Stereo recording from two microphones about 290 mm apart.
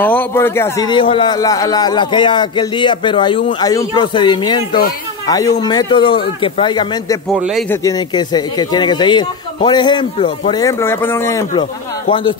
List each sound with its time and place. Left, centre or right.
0.0 s a man's voice: centre